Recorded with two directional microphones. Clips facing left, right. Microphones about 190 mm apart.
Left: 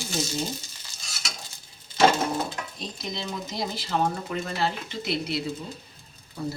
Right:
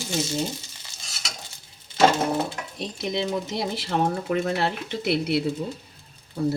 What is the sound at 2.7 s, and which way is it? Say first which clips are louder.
Speech: right 7 dB; 65° right (ahead or behind).